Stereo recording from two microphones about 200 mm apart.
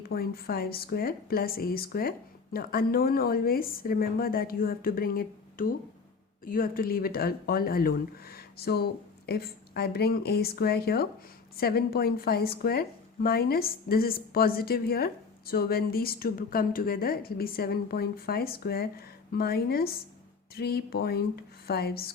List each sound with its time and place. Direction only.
0.1 s a woman's voice: 50° left (ahead or behind)